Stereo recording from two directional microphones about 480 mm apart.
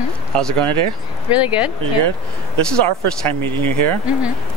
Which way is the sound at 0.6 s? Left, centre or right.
Right.